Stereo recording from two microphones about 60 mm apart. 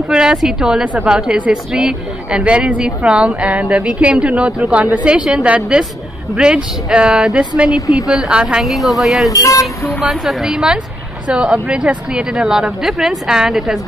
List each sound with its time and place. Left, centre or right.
0.1 s speech: centre
7.3 s speech: centre
8.6 s a woman's voice: centre
9.3 s speech: left
9.8 s a woman's voice: centre